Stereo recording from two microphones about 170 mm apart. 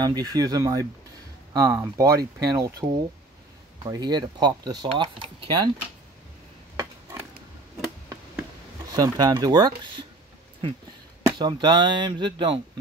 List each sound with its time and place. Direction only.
0.0 s speech: 25° right (ahead or behind)
6.8 s a sound: 20° right (ahead or behind)
8.9 s speech: 20° right (ahead or behind)
11.3 s speech: 25° right (ahead or behind)